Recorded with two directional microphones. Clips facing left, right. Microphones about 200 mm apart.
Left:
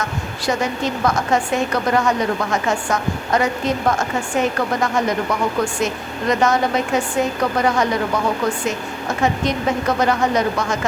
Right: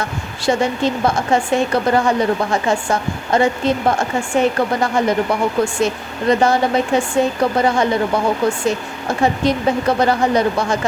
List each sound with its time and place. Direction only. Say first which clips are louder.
0.0 s a woman's voice: right 3 dB; 30° right (ahead or behind)